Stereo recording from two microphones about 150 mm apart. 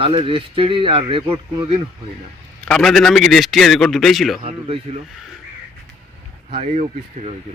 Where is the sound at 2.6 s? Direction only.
5° left (ahead or behind).